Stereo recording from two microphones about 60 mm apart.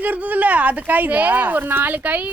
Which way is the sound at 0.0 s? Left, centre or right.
Right.